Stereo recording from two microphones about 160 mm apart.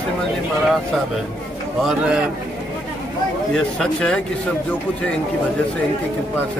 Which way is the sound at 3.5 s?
5° left (ahead or behind).